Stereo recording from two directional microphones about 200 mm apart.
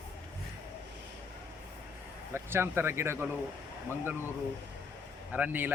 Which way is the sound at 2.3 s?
10° right (ahead or behind).